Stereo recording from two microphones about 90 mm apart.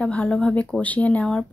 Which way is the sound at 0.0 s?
15° left (ahead or behind).